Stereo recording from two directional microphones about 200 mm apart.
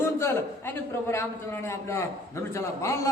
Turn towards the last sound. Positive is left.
turn(degrees=15)  # may be behind; listen again after turning